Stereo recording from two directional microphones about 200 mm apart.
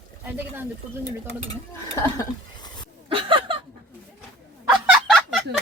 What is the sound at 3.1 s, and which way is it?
Chuckle, 25° right (ahead or behind).